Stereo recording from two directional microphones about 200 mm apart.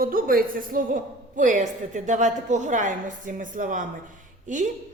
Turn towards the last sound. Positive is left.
turn(degrees=-40)  # may be behind; listen again after turning